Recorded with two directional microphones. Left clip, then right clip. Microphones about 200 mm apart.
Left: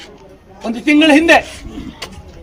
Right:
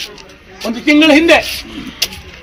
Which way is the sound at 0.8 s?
30° left (ahead or behind).